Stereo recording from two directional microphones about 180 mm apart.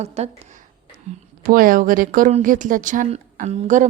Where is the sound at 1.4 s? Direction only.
50° right (ahead or behind).